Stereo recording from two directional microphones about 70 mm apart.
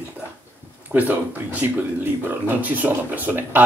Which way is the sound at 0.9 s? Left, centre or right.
Right.